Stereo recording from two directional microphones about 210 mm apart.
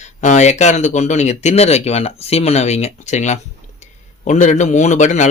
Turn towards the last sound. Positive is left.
turn(degrees=35)  # may be behind; listen again after turning